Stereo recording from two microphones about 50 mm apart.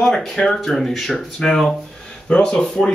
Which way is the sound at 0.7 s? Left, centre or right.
Centre.